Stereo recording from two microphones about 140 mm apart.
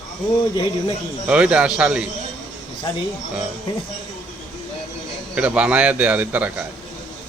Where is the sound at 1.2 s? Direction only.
5° right (ahead or behind).